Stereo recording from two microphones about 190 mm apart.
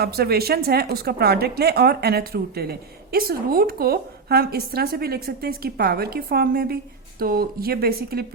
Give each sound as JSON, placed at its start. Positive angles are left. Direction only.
{"t": 0.0, "sound": "speech", "side_deg": -55}